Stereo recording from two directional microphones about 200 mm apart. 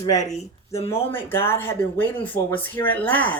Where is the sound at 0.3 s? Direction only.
30° left (ahead or behind).